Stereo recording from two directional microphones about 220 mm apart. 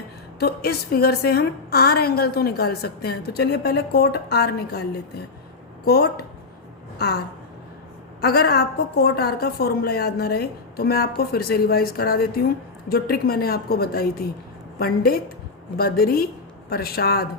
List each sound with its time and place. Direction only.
0.3 s a woman's voice: 45° left (ahead or behind)
5.8 s speech: 45° left (ahead or behind)
8.2 s a woman's voice: 45° left (ahead or behind)